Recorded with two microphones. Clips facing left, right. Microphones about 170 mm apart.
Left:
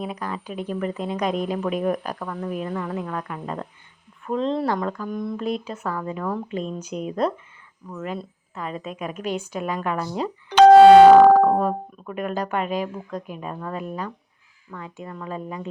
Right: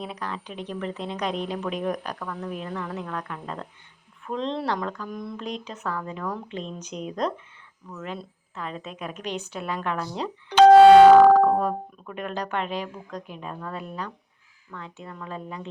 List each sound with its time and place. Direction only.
0.0 s speech: 10° left (ahead or behind)
10.5 s music: 70° left (ahead or behind)
11.1 s speech: 15° left (ahead or behind)